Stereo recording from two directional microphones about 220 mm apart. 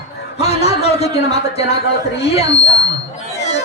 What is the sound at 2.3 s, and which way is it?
Speech, 30° left (ahead or behind).